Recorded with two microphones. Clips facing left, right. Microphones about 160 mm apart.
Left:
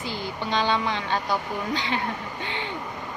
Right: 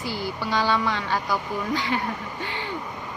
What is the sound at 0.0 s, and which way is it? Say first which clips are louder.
Speech: right 2 dB; 20° left (ahead or behind).